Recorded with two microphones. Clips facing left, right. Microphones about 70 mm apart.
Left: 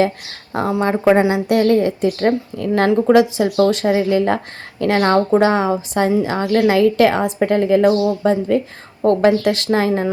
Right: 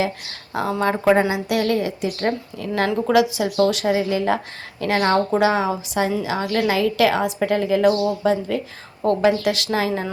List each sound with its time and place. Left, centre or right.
0.7 s speech: left
1.3 s a woman's voice: left